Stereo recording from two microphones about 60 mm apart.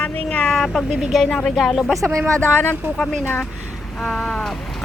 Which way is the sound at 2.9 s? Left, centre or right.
Centre.